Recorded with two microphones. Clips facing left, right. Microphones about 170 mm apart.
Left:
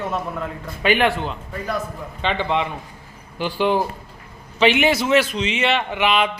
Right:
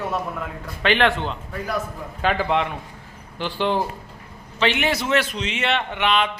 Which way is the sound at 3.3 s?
10° left (ahead or behind).